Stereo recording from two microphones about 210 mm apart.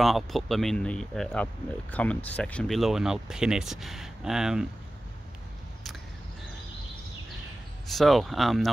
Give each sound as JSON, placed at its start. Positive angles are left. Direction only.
{"t": 0.0, "sound": "speech", "side_deg": 0}
{"t": 7.9, "sound": "speech", "side_deg": 0}